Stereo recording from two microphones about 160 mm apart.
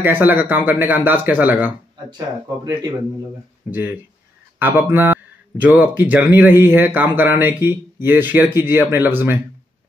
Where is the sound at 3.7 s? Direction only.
10° right (ahead or behind).